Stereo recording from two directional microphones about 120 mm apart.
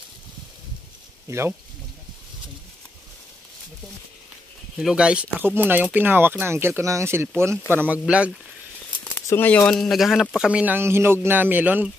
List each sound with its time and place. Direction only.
4.7 s speech: 5° right (ahead or behind)
9.3 s speech: 15° left (ahead or behind)
9.7 s speech: 5° left (ahead or behind); by 11.9 s 15° right (ahead or behind)